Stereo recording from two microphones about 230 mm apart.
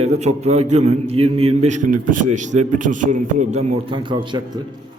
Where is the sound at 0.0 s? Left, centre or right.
Right.